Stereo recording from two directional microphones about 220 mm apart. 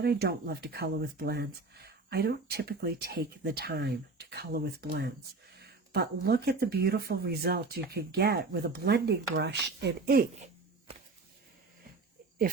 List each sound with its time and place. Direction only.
0.0 s speech: 45° right (ahead or behind)